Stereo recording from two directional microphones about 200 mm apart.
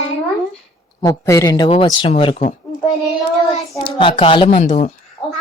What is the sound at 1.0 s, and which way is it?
A child's voice, 15° left (ahead or behind).